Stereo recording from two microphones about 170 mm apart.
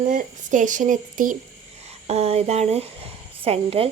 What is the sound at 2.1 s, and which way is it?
Speech, 35° right (ahead or behind).